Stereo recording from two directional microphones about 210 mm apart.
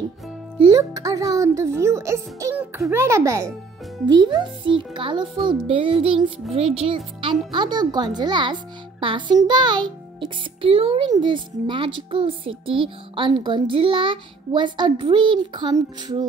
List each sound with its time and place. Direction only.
0.6 s a child's voice: 20° right (ahead or behind)